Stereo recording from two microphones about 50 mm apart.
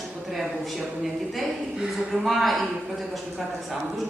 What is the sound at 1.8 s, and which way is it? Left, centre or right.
Speech, centre.